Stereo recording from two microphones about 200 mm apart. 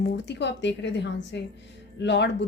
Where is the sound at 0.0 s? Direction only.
60° left (ahead or behind).